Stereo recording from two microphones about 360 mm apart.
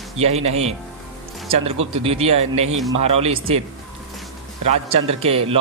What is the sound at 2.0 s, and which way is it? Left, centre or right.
A man's voice, centre.